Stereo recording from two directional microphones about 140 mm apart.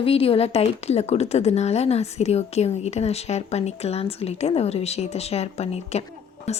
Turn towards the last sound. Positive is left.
turn(degrees=50)  # may be behind; listen again after turning